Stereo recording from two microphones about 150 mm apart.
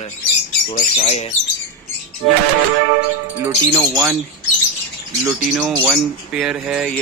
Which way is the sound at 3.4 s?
15° right (ahead or behind).